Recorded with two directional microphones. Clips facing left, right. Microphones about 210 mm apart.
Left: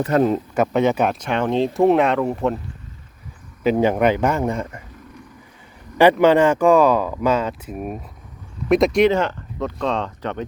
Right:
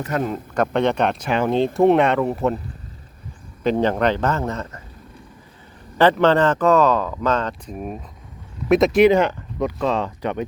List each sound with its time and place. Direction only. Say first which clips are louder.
0.0 s speech: left 6 dB; 35° left (ahead or behind)
0.5 s speech: left 1 dB; 5° left (ahead or behind)
3.6 s speech: left 2 dB; 10° left (ahead or behind)
6.0 s speech: left 2 dB; 10° left (ahead or behind)
9.1 s speech: right 3 dB; 15° right (ahead or behind)